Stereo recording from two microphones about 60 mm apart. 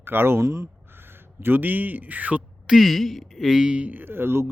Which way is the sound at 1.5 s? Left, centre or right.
Right.